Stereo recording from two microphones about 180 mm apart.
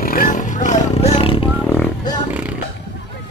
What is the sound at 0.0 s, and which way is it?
Wild animals, 50° left (ahead or behind).